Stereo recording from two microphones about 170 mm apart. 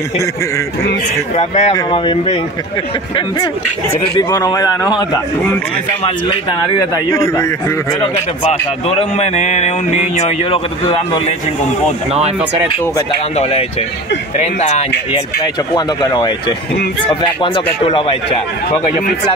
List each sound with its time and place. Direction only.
1.3 s speech: 40° left (ahead or behind)
1.7 s a man's voice: 30° left (ahead or behind)
4.2 s a man's voice: 20° left (ahead or behind)
6.8 s a man's voice: 20° left (ahead or behind)
8.5 s speech: 40° left (ahead or behind)
13.4 s speech: 35° left (ahead or behind)
15.7 s a man's voice: 25° left (ahead or behind)